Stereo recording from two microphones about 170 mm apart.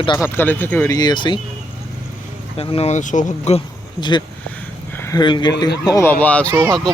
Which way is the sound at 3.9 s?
25° left (ahead or behind).